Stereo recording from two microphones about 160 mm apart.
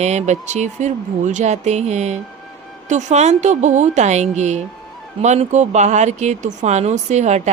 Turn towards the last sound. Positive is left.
turn(degrees=-45)  # may be behind; listen again after turning